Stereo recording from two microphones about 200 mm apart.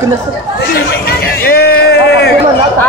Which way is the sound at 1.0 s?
50° left (ahead or behind).